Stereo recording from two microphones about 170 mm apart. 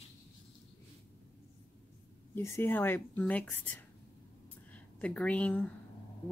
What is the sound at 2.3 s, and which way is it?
Speech, 15° left (ahead or behind).